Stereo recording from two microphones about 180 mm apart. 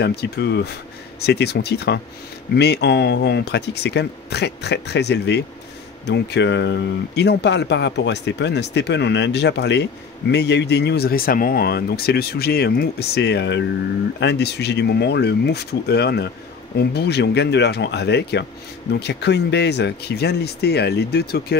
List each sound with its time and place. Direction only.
0.0 s speech: 65° left (ahead or behind)